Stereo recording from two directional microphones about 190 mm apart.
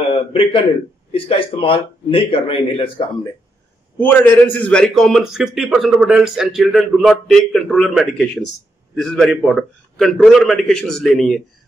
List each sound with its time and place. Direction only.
0.1 s a man's voice: 30° left (ahead or behind)
4.0 s a man's voice: 10° left (ahead or behind)